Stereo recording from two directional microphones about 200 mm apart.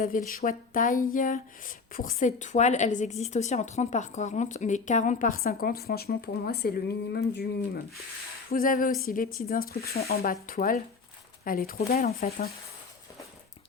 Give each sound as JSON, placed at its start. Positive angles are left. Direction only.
{"t": 0.0, "sound": "speech", "side_deg": 40}
{"t": 8.4, "sound": "speech", "side_deg": 45}